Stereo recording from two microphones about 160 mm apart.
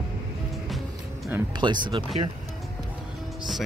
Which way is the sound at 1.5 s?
30° right (ahead or behind).